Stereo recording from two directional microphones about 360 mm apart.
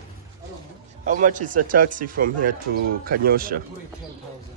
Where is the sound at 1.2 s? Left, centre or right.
Right.